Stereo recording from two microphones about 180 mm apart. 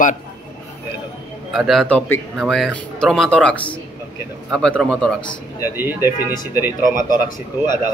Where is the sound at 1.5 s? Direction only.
Centre (ahead or behind).